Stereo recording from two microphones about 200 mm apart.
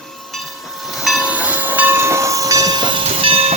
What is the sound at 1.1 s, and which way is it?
Train, 5° right (ahead or behind).